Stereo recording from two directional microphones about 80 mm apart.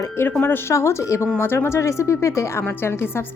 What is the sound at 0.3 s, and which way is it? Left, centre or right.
A woman's voice, left.